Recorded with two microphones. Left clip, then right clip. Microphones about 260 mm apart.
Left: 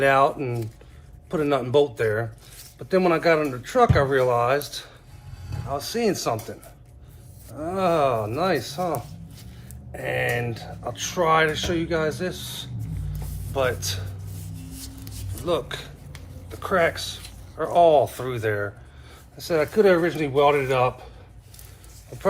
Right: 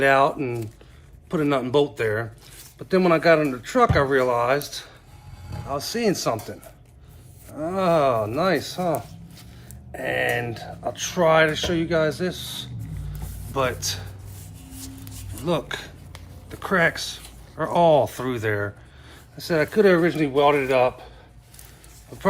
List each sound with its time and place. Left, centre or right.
0.0 s speech: right
13.5 s speech: right
15.4 s dishes: right
17.6 s speech: right